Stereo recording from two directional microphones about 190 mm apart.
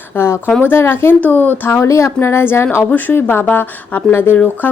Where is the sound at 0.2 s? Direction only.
10° left (ahead or behind).